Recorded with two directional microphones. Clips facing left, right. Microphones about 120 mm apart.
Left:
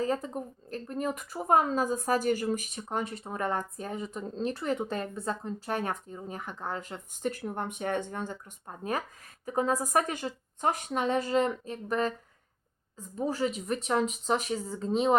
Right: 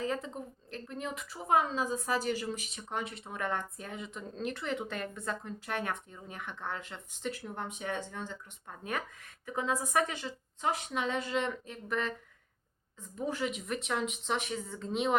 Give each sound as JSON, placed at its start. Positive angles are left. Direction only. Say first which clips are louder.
{"t": 0.0, "sound": "speech", "louder": "left 5 dB", "side_deg": 40}
{"t": 8.6, "sound": "a woman's voice", "louder": "left 5 dB", "side_deg": 35}